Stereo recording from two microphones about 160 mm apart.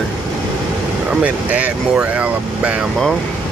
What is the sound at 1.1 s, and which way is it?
Speech, 10° right (ahead or behind).